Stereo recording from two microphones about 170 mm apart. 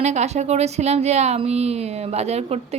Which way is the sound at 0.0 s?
40° right (ahead or behind).